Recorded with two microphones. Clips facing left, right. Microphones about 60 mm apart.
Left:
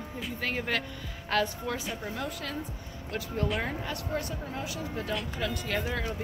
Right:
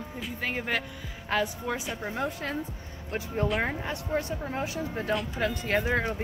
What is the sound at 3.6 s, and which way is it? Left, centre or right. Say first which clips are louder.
Speech: right 2 dB; right.